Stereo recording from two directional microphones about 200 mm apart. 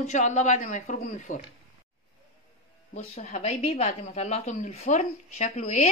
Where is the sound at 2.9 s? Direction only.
35° left (ahead or behind).